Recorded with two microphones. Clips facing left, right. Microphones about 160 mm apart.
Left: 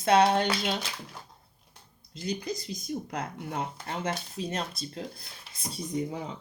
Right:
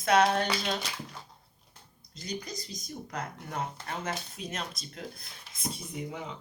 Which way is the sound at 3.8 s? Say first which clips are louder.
Left 3 dB; 25° left (ahead or behind).